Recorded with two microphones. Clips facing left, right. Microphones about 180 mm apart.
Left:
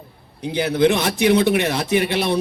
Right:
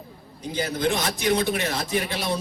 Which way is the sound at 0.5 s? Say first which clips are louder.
Left 8 dB; 65° left (ahead or behind).